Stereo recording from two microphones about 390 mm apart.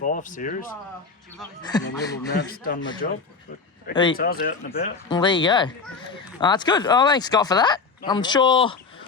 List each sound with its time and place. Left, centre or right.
0.0 s speech: centre
4.2 s speech: left